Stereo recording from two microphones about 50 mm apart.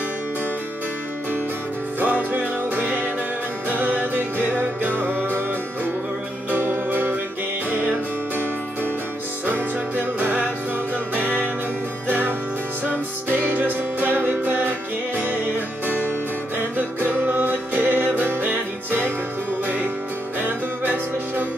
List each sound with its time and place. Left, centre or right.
2.0 s music: right
6.5 s music: right
9.5 s music: right
20.3 s music: right